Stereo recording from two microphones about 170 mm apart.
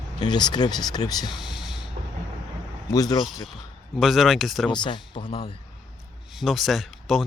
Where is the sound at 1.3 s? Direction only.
Centre (ahead or behind).